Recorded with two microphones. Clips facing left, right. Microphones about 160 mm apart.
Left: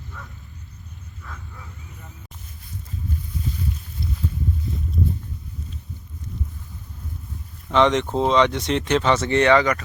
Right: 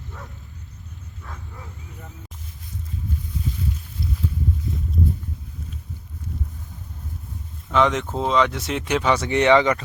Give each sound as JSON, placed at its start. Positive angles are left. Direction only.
{"t": 7.7, "sound": "speech", "side_deg": -5}